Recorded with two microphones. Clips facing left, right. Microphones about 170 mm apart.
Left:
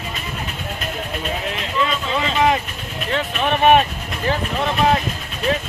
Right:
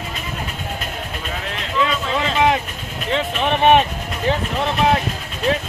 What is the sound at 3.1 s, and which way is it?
Speech, 20° right (ahead or behind).